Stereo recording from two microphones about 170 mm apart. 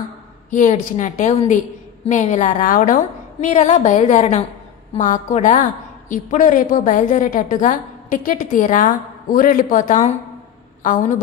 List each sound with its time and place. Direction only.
0.5 s a woman's voice: 45° left (ahead or behind)